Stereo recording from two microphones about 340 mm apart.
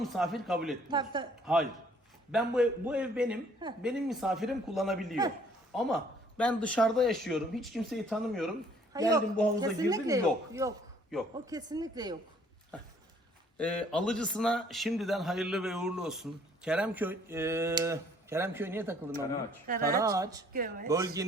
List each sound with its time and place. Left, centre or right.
0.0 s a man's voice: centre
0.9 s speech: centre
2.3 s a man's voice: centre
8.9 s a man's voice: centre
13.6 s a man's voice: centre
19.6 s speech: right
20.0 s speech: centre
20.5 s speech: right
20.8 s speech: centre